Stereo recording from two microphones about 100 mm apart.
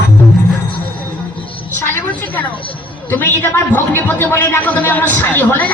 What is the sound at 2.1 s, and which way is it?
A woman's voice, 15° left (ahead or behind).